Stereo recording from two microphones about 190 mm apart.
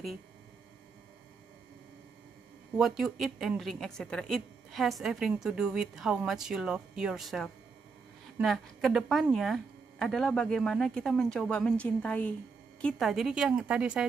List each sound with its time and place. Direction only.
2.8 s speech: centre (ahead or behind)